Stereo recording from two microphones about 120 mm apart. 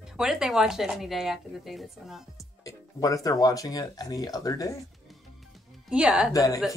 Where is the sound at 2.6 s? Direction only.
30° left (ahead or behind).